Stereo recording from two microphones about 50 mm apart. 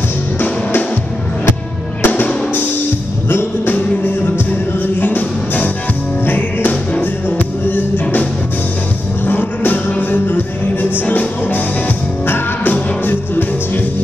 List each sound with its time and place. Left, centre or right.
2.0 s music: left
3.3 s music: left
5.0 s music: left
9.3 s music: left